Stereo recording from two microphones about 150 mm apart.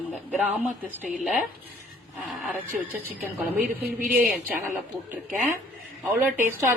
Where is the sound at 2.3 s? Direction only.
Centre (ahead or behind).